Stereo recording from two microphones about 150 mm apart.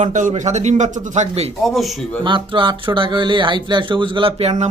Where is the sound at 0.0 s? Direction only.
55° right (ahead or behind).